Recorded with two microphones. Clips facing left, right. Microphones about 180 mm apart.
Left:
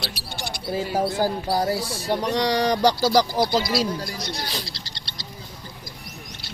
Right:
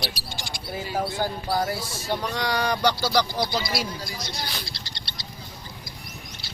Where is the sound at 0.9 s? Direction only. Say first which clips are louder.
Left 3 dB; 40° left (ahead or behind).